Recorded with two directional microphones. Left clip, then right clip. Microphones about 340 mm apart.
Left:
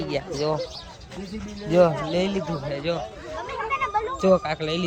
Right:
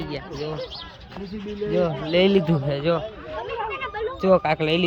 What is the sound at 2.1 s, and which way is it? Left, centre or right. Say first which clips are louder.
Speech: right 7 dB; centre.